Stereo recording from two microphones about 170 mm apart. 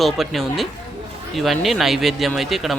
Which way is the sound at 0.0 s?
Centre (ahead or behind).